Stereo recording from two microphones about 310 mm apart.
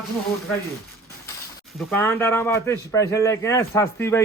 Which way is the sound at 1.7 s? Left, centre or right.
Centre.